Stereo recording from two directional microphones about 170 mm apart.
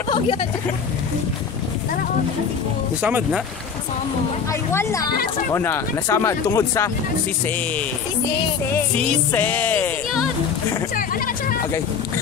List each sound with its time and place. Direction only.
3.0 s speech: 10° right (ahead or behind)
4.5 s speech: 20° left (ahead or behind)
8.9 s speech: 10° left (ahead or behind)